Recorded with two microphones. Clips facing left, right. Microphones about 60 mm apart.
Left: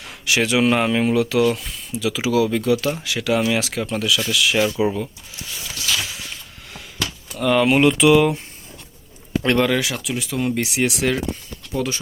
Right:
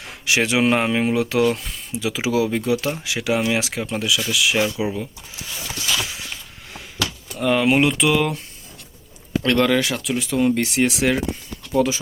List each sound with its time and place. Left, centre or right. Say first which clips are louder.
0.0 s speech: even; right
1.2 s speech: left 1 dB; right; by 4.9 s centre
7.3 s speech: left 1 dB; centre
9.6 s speech: right 1 dB; centre